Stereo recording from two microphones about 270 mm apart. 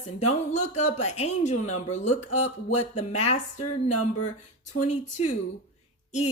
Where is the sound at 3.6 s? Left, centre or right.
Left.